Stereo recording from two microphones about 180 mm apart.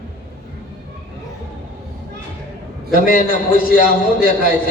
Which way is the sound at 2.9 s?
50° left (ahead or behind).